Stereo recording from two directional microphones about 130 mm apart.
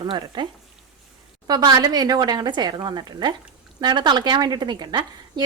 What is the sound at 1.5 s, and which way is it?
A woman's voice, 30° right (ahead or behind).